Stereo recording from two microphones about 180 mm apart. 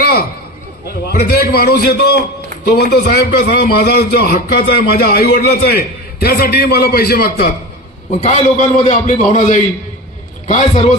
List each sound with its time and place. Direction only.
0.0 s a sound: 60° left (ahead or behind)
0.9 s a man's voice: 60° left (ahead or behind)
8.2 s a man's voice: 40° left (ahead or behind)